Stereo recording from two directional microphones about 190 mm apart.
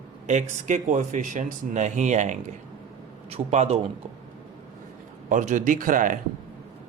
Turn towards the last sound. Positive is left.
turn(degrees=-45)  # may be behind; listen again after turning